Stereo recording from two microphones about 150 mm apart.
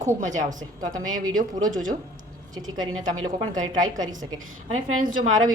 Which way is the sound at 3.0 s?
50° right (ahead or behind).